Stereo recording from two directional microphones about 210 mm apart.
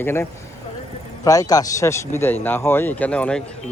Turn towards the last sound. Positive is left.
turn(degrees=5)  # may be behind; listen again after turning